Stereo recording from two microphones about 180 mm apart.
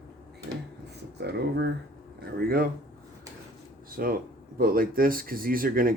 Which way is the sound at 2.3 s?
55° right (ahead or behind).